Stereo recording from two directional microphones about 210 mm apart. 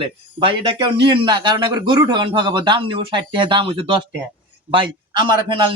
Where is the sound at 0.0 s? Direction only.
25° right (ahead or behind).